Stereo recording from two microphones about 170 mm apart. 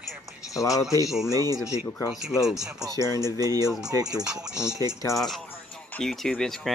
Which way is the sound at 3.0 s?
15° left (ahead or behind).